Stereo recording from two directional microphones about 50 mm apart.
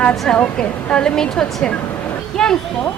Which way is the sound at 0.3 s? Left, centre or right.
Left.